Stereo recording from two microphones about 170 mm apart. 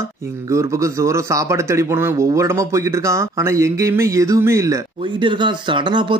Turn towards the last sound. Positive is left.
turn(degrees=-30)  # may be behind; listen again after turning